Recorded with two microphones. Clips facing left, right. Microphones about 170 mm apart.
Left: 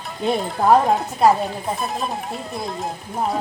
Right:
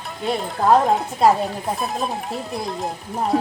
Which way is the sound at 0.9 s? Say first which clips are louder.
Even; centre (ahead or behind).